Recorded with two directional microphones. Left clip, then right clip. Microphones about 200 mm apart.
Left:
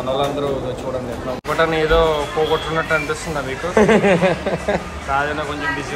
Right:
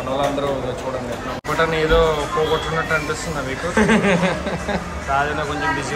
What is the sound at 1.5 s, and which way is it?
Speech, 5° right (ahead or behind).